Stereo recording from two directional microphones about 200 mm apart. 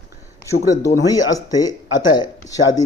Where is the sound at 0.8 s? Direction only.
15° left (ahead or behind).